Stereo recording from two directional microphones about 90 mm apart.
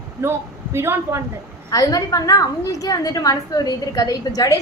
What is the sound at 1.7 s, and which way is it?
A woman's voice, 45° left (ahead or behind).